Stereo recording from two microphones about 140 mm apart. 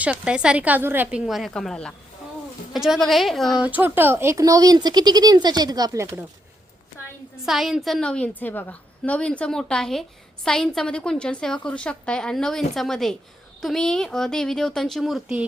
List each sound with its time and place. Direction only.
0.0 s a woman's voice: 10° right (ahead or behind)
1.2 s a woman's voice: centre (ahead or behind); by 6.1 s 20° right (ahead or behind)
7.4 s a woman's voice: 5° right (ahead or behind)